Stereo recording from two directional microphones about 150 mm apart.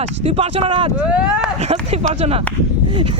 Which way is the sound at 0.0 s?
45° right (ahead or behind).